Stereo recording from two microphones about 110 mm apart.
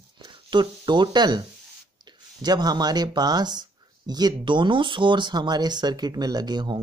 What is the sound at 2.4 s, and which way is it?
Speech, 40° right (ahead or behind).